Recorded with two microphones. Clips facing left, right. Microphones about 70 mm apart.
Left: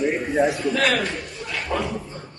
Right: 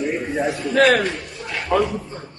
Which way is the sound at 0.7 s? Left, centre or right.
Right.